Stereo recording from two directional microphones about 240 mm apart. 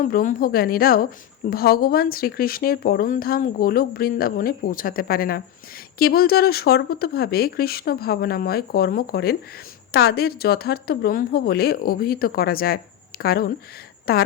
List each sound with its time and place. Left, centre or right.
0.0 s speech: left